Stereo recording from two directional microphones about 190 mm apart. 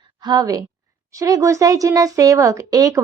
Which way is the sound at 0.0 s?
20° right (ahead or behind).